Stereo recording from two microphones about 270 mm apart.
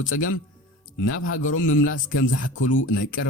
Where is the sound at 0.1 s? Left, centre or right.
Left.